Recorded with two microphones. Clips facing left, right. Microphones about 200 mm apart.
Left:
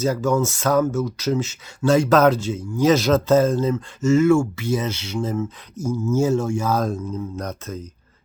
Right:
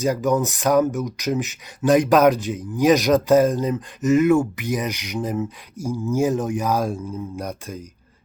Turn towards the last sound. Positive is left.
turn(degrees=-10)  # may be behind; listen again after turning